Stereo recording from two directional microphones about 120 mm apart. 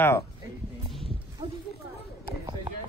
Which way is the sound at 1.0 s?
50° right (ahead or behind).